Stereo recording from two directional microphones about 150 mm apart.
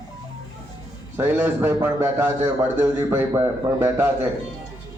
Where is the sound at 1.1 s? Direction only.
15° right (ahead or behind).